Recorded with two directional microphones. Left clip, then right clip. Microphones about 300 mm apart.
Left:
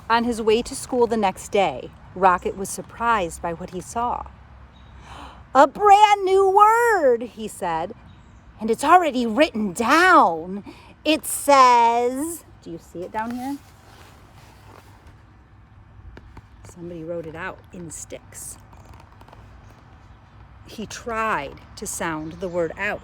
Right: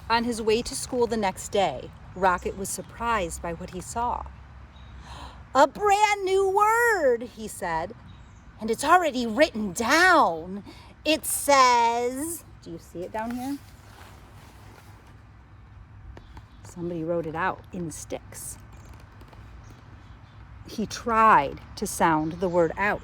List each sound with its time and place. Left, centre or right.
0.1 s speech: left
13.3 s speech: centre
16.3 s a sound: centre
17.3 s speech: centre
20.7 s speech: centre